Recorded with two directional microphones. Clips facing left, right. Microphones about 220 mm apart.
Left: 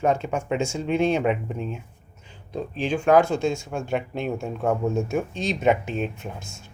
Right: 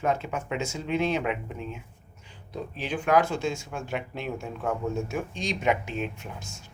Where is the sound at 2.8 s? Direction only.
30° left (ahead or behind).